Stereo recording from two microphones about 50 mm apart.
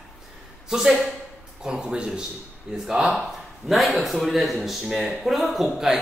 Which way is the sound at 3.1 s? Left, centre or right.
Centre.